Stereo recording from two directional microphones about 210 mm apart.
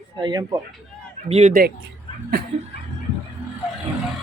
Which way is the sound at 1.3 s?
30° right (ahead or behind).